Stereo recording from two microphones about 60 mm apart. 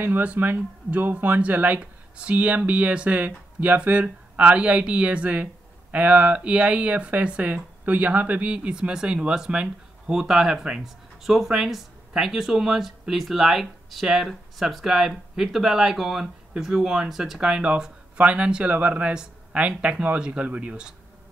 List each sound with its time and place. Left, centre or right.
0.0 s speech: right